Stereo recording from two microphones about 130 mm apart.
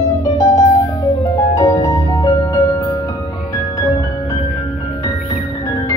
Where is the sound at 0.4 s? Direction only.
25° left (ahead or behind).